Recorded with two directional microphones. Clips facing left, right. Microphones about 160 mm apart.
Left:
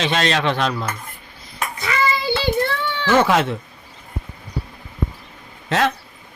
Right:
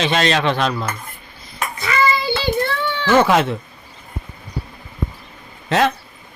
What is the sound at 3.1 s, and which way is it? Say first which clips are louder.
Speech: right 2 dB; 15° right (ahead or behind).